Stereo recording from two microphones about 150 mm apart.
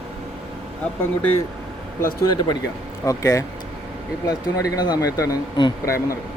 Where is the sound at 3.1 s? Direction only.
20° left (ahead or behind).